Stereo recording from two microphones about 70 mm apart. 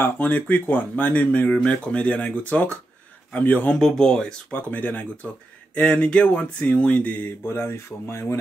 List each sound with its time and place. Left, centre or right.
0.0 s speech: left
3.7 s speech: centre
4.5 s speech: left
7.4 s speech: left